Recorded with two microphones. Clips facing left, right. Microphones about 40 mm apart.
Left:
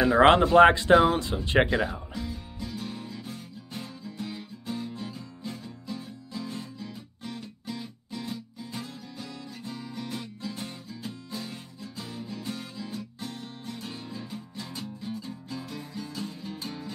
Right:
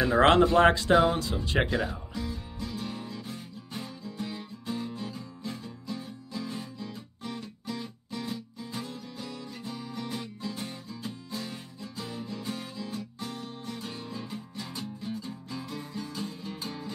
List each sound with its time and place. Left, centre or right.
0.0 s speech: centre
1.3 s music: left; by 16.9 s centre